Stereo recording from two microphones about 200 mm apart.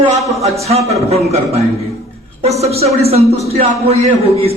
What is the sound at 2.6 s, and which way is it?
Speech, 30° right (ahead or behind).